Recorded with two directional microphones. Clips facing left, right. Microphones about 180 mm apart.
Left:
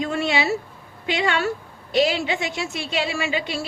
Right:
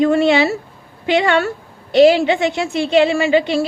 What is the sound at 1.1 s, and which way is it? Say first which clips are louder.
Speech: right 9 dB; 60° right (ahead or behind).